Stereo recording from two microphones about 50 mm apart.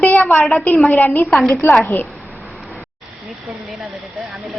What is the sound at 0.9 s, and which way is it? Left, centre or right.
Speech, left.